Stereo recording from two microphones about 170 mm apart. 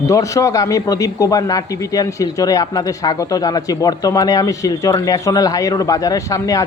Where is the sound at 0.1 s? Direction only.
20° left (ahead or behind).